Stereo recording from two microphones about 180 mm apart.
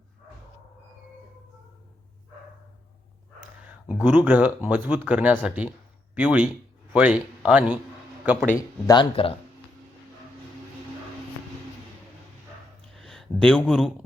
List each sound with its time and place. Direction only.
4.0 s speech: 10° right (ahead or behind)
8.5 s speech: 25° left (ahead or behind)
12.9 s a sound: centre (ahead or behind)